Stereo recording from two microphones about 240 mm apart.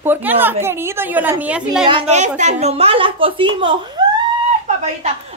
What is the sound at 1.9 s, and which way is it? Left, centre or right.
A woman's voice, right.